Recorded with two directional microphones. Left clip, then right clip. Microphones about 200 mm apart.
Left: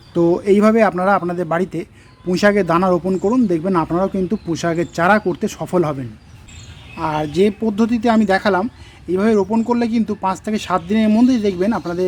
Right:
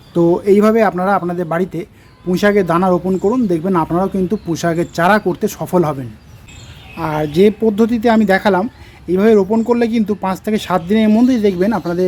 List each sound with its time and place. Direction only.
0.1 s a man's voice: 5° left (ahead or behind)